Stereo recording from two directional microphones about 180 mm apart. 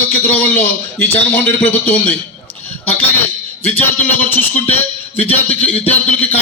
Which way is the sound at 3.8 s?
10° left (ahead or behind).